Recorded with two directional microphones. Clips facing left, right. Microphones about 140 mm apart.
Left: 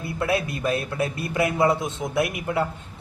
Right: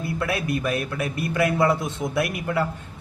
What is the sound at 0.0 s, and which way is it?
A man's voice, 25° left (ahead or behind).